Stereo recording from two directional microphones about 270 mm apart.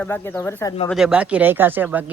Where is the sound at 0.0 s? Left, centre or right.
Centre.